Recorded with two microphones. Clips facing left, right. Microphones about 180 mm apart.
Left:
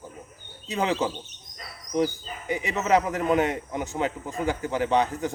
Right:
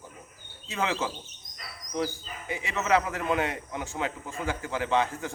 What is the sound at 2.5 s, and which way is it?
A man's voice, 20° left (ahead or behind).